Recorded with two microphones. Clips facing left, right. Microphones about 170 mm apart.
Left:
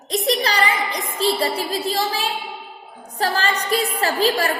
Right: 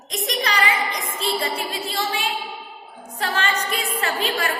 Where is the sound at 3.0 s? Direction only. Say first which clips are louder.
Left 3 dB; 35° left (ahead or behind).